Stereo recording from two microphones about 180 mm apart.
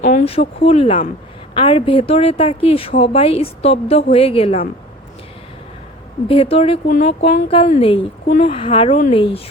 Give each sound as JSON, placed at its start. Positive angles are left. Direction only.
{"t": 0.0, "sound": "a sound", "side_deg": 45}
{"t": 0.3, "sound": "a woman's voice", "side_deg": 35}
{"t": 6.2, "sound": "a woman's voice", "side_deg": 30}
{"t": 6.8, "sound": "speech", "side_deg": 50}
{"t": 7.4, "sound": "a woman's voice", "side_deg": 30}